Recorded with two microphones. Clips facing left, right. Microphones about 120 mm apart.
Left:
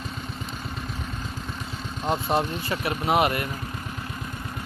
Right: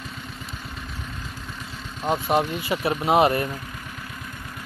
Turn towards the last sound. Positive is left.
turn(degrees=-30)  # may be behind; listen again after turning